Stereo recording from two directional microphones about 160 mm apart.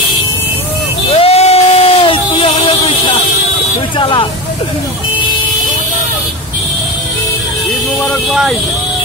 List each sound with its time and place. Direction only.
1.1 s a sound: 40° left (ahead or behind)
4.0 s speech: 30° left (ahead or behind)
8.3 s speech: centre (ahead or behind)